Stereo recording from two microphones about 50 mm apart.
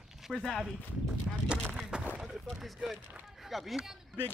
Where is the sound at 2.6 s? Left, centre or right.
Centre.